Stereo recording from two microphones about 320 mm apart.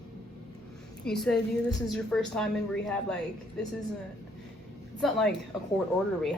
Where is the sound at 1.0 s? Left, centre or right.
Centre.